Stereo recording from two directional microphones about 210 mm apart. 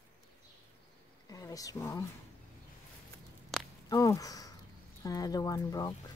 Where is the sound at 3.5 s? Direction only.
Centre (ahead or behind).